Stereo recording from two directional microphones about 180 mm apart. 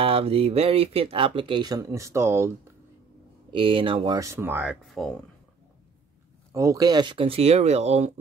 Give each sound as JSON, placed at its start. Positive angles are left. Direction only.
{"t": 0.0, "sound": "speech", "side_deg": -30}
{"t": 3.5, "sound": "speech", "side_deg": -30}
{"t": 4.2, "sound": "speech", "side_deg": -15}
{"t": 4.8, "sound": "speech", "side_deg": 0}
{"t": 6.5, "sound": "speech", "side_deg": -15}